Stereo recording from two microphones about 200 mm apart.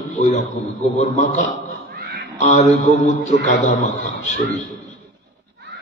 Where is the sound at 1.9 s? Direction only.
50° right (ahead or behind).